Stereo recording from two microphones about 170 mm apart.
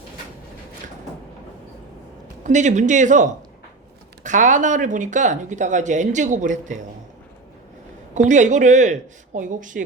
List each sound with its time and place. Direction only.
2.4 s speech: 45° right (ahead or behind)
8.1 s speech: 45° right (ahead or behind)